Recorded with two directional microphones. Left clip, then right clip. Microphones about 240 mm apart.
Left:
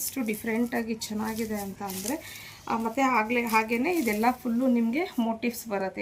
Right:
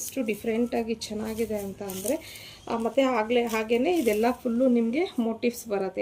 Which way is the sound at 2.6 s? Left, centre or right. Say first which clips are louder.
Right 1 dB; left.